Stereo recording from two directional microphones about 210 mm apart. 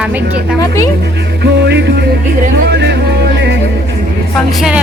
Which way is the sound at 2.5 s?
50° right (ahead or behind).